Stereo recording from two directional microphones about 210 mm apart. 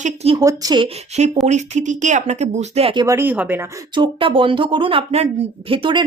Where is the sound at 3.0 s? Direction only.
10° right (ahead or behind).